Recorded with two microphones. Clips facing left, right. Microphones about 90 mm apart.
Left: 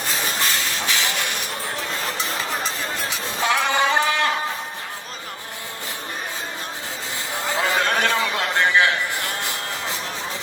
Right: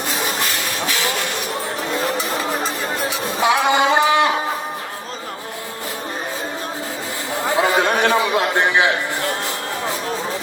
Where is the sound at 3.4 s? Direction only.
15° right (ahead or behind).